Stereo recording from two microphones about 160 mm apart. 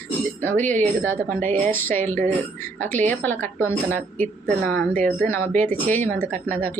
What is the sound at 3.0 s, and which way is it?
Speech, 10° left (ahead or behind).